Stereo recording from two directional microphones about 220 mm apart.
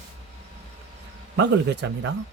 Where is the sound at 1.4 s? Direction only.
50° right (ahead or behind).